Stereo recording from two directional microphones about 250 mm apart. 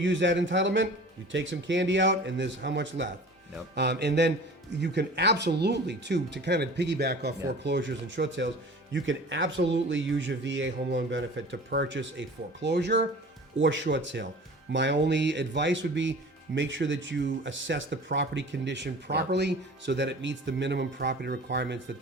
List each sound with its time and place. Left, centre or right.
0.0 s speech: right